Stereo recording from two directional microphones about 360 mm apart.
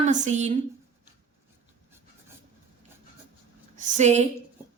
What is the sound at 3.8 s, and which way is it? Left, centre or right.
Speech, centre.